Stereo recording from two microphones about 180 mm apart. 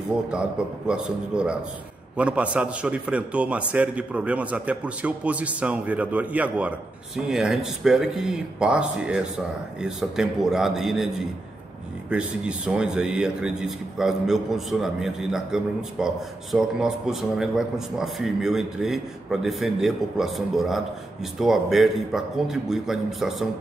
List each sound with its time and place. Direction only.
0.3 s a man's voice: 5° right (ahead or behind)